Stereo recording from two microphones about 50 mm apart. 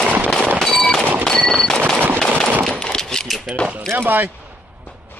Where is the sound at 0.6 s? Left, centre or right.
Centre.